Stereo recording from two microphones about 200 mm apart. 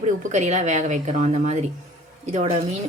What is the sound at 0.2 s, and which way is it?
Speech, 35° right (ahead or behind).